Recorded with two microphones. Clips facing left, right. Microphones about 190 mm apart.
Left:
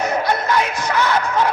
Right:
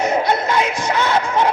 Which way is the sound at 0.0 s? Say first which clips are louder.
Right 2 dB; 25° right (ahead or behind).